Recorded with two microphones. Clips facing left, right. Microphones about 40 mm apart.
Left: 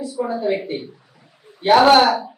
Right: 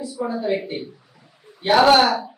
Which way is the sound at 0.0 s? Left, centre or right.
Centre.